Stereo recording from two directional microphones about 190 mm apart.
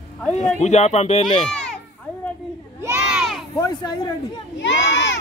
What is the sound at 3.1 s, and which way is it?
Crowd, 5° right (ahead or behind).